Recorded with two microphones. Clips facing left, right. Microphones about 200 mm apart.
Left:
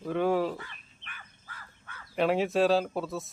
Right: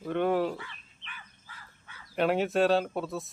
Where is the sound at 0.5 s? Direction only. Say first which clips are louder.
Even; 45° left (ahead or behind).